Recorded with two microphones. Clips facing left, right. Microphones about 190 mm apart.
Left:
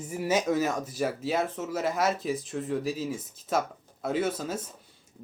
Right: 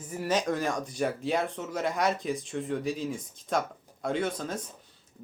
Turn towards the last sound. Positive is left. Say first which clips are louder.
# left 2 dB
turn(degrees=5)  # may be behind; listen again after turning